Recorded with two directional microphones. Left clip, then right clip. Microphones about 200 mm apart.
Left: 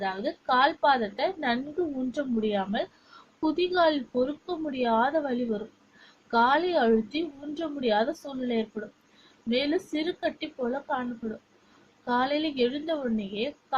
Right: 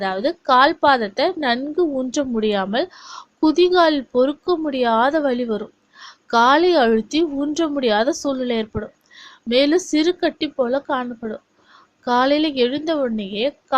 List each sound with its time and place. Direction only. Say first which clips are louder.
0.0 s a woman's voice: right 9 dB; 50° right (ahead or behind)